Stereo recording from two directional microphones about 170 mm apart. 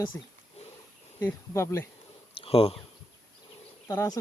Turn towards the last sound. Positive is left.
turn(degrees=20)  # may be behind; listen again after turning